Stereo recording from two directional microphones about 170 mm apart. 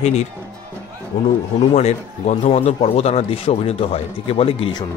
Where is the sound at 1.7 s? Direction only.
40° left (ahead or behind).